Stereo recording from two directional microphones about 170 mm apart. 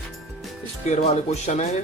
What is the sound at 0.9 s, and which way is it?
Speech, 40° left (ahead or behind).